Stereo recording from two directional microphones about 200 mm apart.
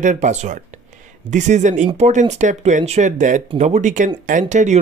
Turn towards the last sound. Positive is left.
turn(degrees=-35)  # may be behind; listen again after turning